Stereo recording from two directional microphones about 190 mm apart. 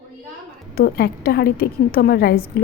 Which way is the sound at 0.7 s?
55° left (ahead or behind).